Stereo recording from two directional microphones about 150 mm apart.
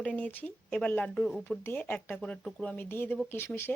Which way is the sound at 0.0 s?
10° left (ahead or behind).